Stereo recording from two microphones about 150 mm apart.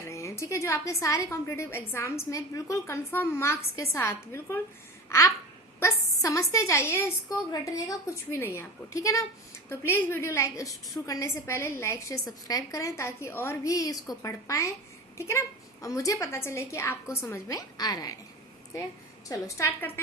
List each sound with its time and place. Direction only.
0.1 s a woman's voice: 20° left (ahead or behind)
5.0 s babbling: 20° left (ahead or behind)
5.8 s a sound: 20° left (ahead or behind)
6.5 s a woman's voice: 20° left (ahead or behind)
19.3 s a woman's voice: 20° left (ahead or behind)